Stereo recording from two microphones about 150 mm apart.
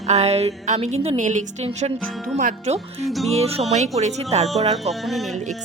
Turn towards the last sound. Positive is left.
turn(degrees=0)  # may be behind; listen again after turning